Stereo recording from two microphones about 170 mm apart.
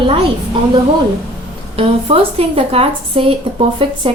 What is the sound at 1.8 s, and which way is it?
A woman's voice, 35° right (ahead or behind).